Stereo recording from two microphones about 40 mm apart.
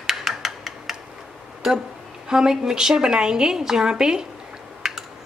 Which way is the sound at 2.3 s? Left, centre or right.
Centre.